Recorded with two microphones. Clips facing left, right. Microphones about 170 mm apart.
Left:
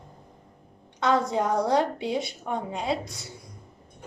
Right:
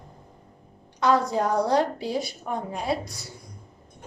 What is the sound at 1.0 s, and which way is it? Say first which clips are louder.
A woman's voice: right 2 dB; 25° left (ahead or behind).